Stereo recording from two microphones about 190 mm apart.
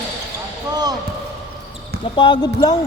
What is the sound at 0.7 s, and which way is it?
Basketball bounce, 20° right (ahead or behind).